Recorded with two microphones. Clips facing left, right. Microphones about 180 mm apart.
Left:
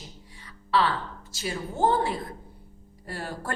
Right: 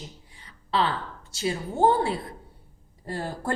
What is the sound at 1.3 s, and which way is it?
Speech, 30° right (ahead or behind).